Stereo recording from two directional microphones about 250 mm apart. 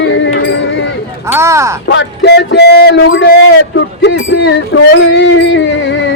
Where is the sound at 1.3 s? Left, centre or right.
Centre.